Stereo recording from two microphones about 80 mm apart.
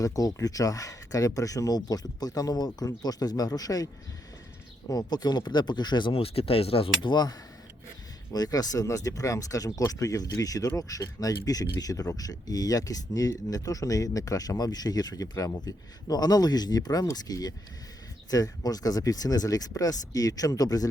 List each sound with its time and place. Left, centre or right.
0.0 s speech: left
4.9 s speech: left
8.3 s speech: left